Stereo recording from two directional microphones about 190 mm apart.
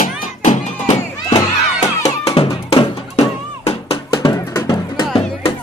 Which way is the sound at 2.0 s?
30° left (ahead or behind).